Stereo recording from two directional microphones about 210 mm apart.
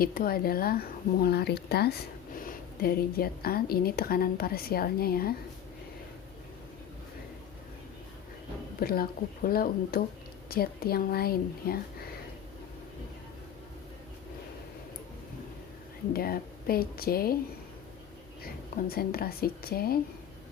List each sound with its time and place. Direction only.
0.0 s a woman's voice: 45° left (ahead or behind)
8.8 s a woman's voice: 45° left (ahead or behind)
16.1 s a woman's voice: 45° left (ahead or behind)
18.4 s a woman's voice: 45° left (ahead or behind)